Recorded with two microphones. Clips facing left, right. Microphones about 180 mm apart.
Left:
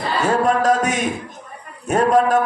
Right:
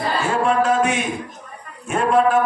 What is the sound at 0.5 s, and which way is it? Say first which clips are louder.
Music: left 1 dB; 40° left (ahead or behind).